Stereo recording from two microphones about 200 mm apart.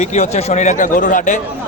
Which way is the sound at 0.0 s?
35° left (ahead or behind).